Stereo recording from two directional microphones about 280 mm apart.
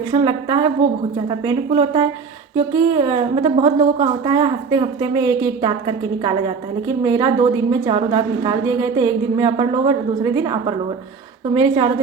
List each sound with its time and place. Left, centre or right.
0.1 s a woman's voice: centre
6.8 s a woman's voice: centre